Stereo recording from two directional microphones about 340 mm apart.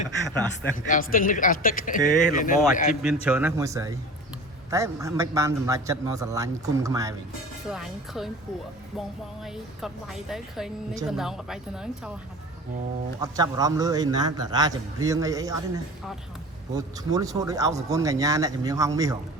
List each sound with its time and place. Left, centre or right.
0.3 s a woman's voice: centre
0.9 s speech: left
2.9 s a woman's voice: centre
13.1 s a man's voice: centre